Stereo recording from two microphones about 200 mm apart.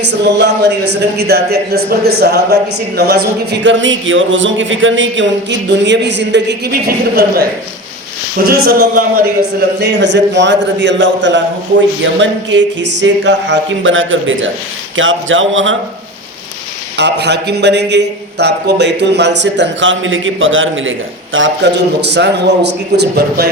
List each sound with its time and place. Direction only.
0.0 s speech: 55° right (ahead or behind)
8.4 s speech: 50° right (ahead or behind); by 15.7 s 75° right (ahead or behind)
17.0 s speech: 60° right (ahead or behind); by 20.9 s 75° right (ahead or behind)
21.3 s speech: 65° right (ahead or behind)